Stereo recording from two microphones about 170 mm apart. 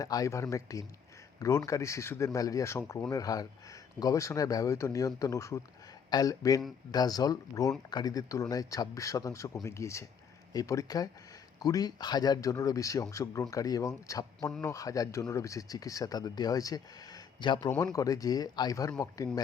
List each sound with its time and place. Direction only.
0.0 s speech: 20° left (ahead or behind)